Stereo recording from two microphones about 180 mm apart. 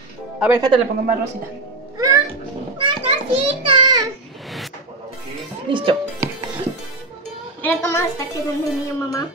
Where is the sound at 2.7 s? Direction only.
30° right (ahead or behind).